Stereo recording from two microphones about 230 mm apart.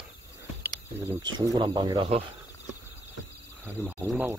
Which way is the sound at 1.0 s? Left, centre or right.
Centre.